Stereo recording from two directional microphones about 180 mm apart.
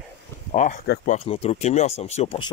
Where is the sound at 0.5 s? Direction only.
45° left (ahead or behind).